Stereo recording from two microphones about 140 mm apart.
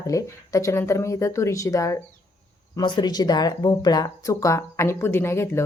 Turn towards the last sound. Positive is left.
turn(degrees=20)  # may be behind; listen again after turning